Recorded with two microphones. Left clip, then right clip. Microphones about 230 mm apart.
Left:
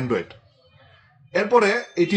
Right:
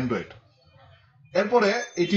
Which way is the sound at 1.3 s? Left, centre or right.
Left.